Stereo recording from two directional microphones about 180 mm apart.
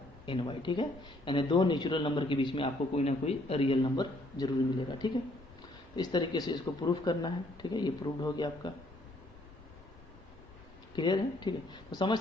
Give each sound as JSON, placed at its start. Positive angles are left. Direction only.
{"t": 0.3, "sound": "speech", "side_deg": 25}
{"t": 10.9, "sound": "speech", "side_deg": 25}